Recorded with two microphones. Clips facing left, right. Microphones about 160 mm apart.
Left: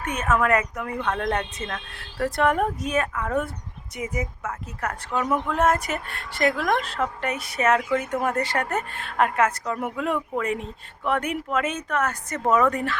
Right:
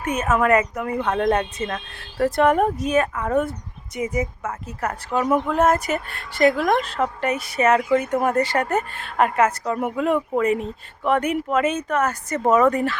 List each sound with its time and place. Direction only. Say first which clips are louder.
0.0 s speech: right 3 dB; 5° right (ahead or behind)
1.0 s speech: right 5 dB; 20° right (ahead or behind)
1.3 s speech: right 6 dB; 5° right (ahead or behind)